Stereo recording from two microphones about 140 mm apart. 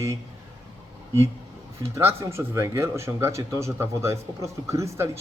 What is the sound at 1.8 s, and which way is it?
Speech, 20° right (ahead or behind).